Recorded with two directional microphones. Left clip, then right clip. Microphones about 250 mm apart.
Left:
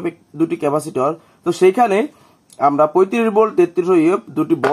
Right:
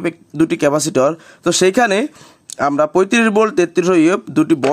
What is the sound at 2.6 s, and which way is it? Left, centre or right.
Speech, right.